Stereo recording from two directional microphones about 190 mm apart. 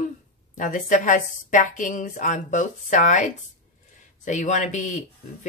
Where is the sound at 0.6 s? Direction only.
40° left (ahead or behind).